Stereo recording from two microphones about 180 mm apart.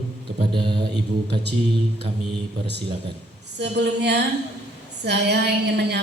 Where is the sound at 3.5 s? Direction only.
70° right (ahead or behind).